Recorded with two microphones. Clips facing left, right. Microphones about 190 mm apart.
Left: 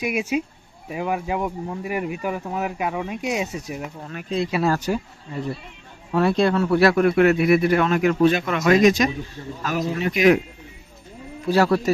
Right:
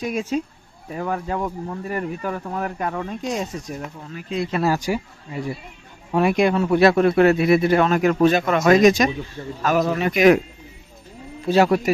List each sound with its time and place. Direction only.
0.0 s speech: 10° left (ahead or behind)
4.6 s speech: 10° right (ahead or behind); by 9.0 s 45° right (ahead or behind)
9.6 s a man's voice: 60° right (ahead or behind)
11.4 s speech: 20° right (ahead or behind)